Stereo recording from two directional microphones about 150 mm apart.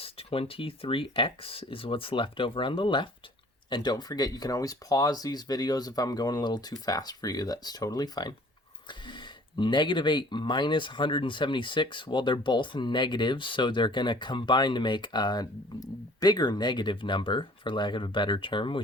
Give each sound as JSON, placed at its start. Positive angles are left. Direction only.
{"t": 0.0, "sound": "speech", "side_deg": 40}
{"t": 9.6, "sound": "speech", "side_deg": 30}